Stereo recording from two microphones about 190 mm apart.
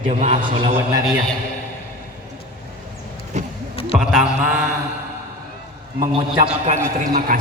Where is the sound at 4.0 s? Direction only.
Centre (ahead or behind).